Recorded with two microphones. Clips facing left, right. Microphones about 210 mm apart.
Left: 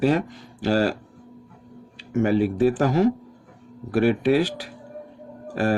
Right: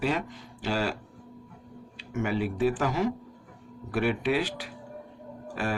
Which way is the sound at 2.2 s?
40° left (ahead or behind).